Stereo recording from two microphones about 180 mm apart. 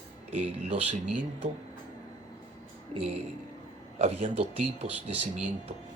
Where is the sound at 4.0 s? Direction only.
35° right (ahead or behind).